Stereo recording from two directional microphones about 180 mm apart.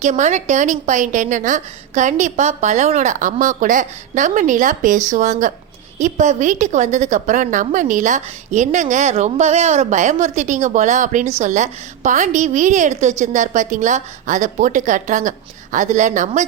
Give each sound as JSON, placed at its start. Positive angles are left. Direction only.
{"t": 0.0, "sound": "a woman's voice", "side_deg": -40}